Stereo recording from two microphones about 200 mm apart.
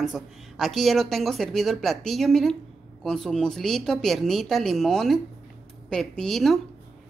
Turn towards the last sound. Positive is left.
turn(degrees=0)  # may be behind; listen again after turning